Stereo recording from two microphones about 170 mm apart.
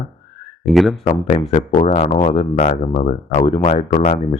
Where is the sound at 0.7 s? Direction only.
Centre (ahead or behind).